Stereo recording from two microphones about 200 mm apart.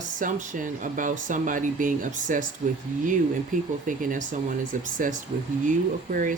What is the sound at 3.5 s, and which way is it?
Speech, 40° right (ahead or behind).